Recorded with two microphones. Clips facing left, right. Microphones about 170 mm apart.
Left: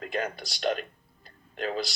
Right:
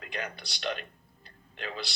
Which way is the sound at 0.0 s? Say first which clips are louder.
Left 7 dB; 40° left (ahead or behind).